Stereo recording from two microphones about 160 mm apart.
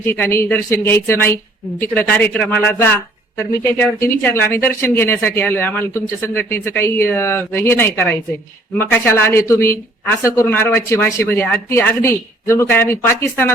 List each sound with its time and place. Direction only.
0.0 s speech: 15° left (ahead or behind)